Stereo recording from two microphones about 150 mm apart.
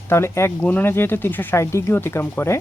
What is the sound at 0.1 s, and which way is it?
Speech, 15° left (ahead or behind).